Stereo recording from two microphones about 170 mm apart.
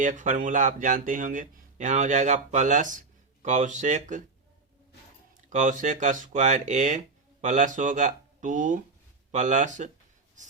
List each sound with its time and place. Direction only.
0.0 s speech: 50° right (ahead or behind)
5.5 s speech: 50° right (ahead or behind)